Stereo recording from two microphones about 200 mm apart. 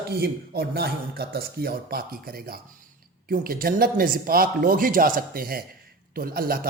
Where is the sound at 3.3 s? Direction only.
45° right (ahead or behind).